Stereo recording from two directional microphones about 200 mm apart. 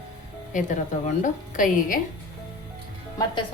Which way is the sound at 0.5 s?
40° left (ahead or behind).